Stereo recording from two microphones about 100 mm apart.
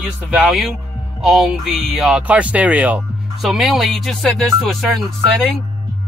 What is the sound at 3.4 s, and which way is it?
Music, centre (ahead or behind).